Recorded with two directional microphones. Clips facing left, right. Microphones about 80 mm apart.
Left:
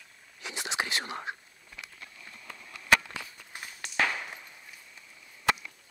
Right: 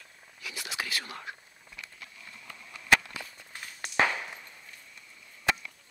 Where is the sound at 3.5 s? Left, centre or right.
Centre.